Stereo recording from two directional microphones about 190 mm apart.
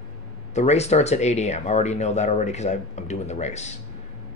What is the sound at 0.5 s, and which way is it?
Speech, 35° left (ahead or behind).